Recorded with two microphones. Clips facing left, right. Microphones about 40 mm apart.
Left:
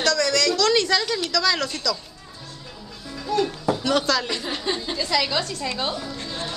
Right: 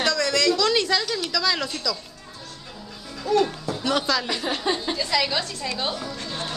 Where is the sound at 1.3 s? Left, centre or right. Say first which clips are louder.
Left 2 dB; centre.